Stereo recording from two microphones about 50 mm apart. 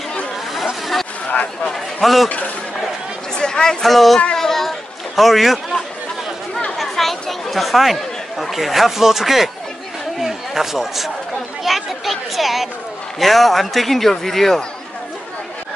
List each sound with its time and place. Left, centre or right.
1.3 s speech: left
1.7 s a man's voice: centre
2.2 s speech: left
3.3 s speech: centre
3.8 s a man's voice: centre
4.4 s children playing: centre
6.8 s speech: centre
10.2 s a sound: centre
11.6 s a man's voice: centre